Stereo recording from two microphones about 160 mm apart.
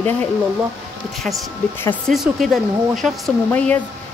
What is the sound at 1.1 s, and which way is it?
Speech, centre (ahead or behind).